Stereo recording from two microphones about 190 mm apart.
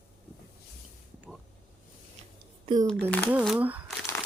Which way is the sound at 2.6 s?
20° right (ahead or behind).